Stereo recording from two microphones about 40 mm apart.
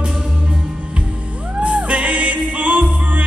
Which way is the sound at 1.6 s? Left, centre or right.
Right.